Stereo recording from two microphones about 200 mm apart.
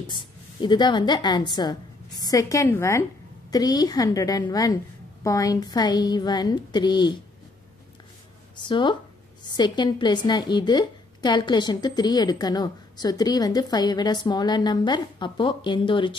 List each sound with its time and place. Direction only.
0.1 s a woman's voice: 25° left (ahead or behind)
8.5 s a woman's voice: 25° left (ahead or behind)